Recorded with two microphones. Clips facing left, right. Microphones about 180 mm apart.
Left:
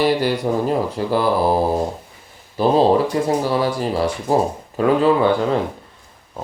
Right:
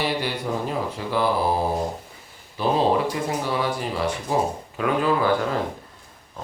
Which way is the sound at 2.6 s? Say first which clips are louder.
Left 6 dB; 40° left (ahead or behind).